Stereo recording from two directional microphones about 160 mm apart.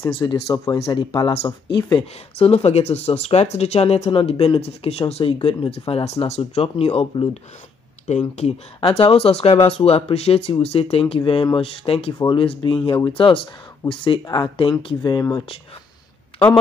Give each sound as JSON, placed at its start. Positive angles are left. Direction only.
{"t": 0.1, "sound": "speech", "side_deg": 30}